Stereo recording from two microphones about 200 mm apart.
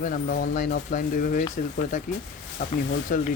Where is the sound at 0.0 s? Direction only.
45° left (ahead or behind).